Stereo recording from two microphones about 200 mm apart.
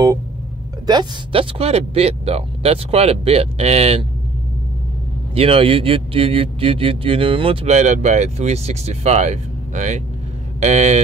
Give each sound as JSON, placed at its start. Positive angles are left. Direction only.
{"t": 0.8, "sound": "a man's voice", "side_deg": -20}
{"t": 5.3, "sound": "a man's voice", "side_deg": -30}